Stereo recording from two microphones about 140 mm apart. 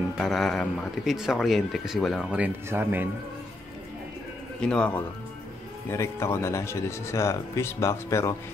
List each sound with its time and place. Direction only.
0.2 s speech: centre (ahead or behind)
2.4 s speech: 15° right (ahead or behind)
4.6 s speech: 5° left (ahead or behind)
5.9 s speech: 20° left (ahead or behind)